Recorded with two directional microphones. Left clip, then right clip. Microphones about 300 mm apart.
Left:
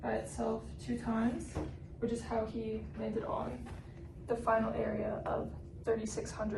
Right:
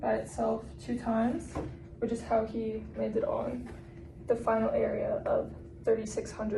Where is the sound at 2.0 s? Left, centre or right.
Centre.